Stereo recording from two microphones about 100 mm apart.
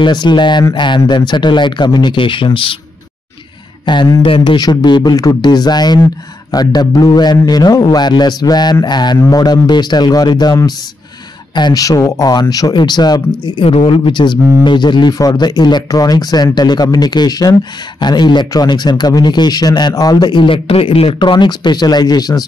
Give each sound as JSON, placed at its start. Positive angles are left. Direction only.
{"t": 0.0, "sound": "a man's voice", "side_deg": 50}
{"t": 3.8, "sound": "speech", "side_deg": 50}
{"t": 4.2, "sound": "speech", "side_deg": 65}
{"t": 4.6, "sound": "a man's voice", "side_deg": 45}
{"t": 13.7, "sound": "a man's voice", "side_deg": 70}